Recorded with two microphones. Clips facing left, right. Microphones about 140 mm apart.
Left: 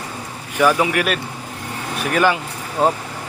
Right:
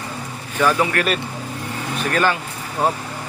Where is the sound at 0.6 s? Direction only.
10° left (ahead or behind).